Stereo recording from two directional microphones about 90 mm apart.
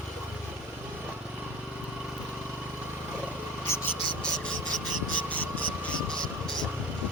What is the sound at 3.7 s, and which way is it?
Speech, 30° left (ahead or behind).